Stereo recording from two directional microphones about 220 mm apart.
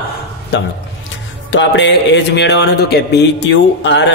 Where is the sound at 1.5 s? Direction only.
55° left (ahead or behind).